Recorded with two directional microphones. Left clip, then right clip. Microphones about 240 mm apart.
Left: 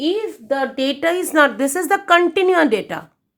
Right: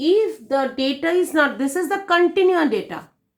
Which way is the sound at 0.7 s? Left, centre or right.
Left.